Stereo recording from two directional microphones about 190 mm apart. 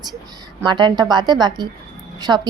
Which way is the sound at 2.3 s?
10° right (ahead or behind).